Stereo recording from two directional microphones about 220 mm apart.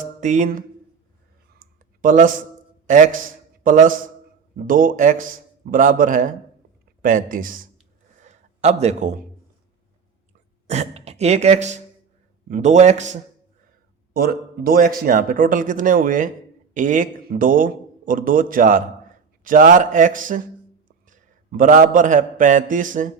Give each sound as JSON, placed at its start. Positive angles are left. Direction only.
{"t": 0.2, "sound": "speech", "side_deg": -35}
{"t": 1.5, "sound": "clicking", "side_deg": -35}
{"t": 2.8, "sound": "a man's voice", "side_deg": -35}
{"t": 8.2, "sound": "a sound", "side_deg": -30}
{"t": 10.7, "sound": "speech", "side_deg": -30}
{"t": 14.1, "sound": "a man's voice", "side_deg": -45}